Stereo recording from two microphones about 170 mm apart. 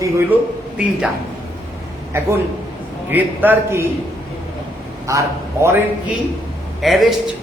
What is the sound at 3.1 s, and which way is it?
Speech, 10° right (ahead or behind).